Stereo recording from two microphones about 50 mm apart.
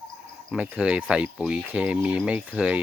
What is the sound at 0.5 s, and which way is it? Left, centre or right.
Speech, right.